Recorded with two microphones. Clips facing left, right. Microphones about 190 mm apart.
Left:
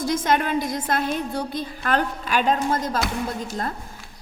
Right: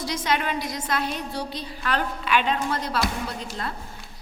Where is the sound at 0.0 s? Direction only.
50° left (ahead or behind).